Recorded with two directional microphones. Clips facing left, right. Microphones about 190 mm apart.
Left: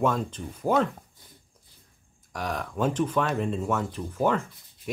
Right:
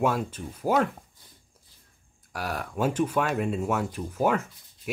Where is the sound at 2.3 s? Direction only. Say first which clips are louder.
Even; 5° right (ahead or behind).